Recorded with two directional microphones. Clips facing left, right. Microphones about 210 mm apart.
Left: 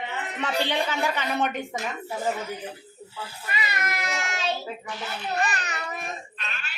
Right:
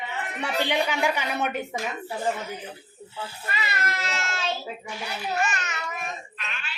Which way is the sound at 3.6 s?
15° left (ahead or behind).